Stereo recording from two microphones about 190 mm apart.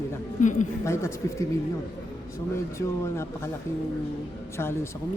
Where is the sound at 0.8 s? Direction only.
15° left (ahead or behind).